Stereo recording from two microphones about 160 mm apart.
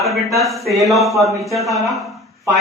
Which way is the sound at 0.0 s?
Centre (ahead or behind).